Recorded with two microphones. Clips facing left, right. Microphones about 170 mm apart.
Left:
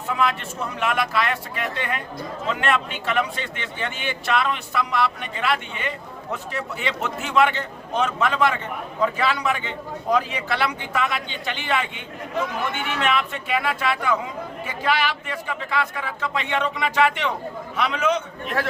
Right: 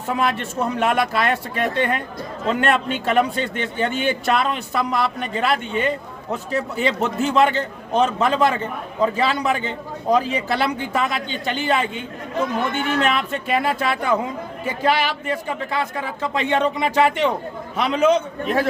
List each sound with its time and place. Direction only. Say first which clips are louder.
0.1 s a man's voice: right 2 dB; 40° right (ahead or behind)